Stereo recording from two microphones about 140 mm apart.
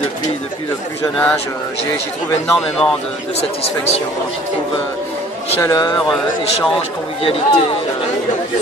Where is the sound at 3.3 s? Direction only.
45° left (ahead or behind).